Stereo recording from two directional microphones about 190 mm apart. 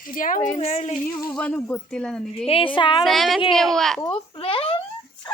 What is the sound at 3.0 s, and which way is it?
Speech, centre (ahead or behind).